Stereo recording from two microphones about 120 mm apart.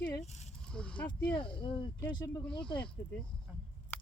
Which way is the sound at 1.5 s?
45° left (ahead or behind).